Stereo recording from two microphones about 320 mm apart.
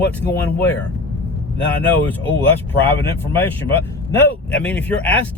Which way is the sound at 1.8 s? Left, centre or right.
Centre.